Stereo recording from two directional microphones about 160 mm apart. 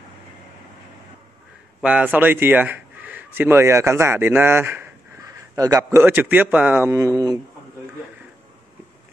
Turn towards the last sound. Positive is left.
turn(degrees=-20)  # may be behind; listen again after turning